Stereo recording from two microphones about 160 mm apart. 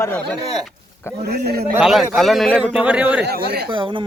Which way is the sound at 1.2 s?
85° right.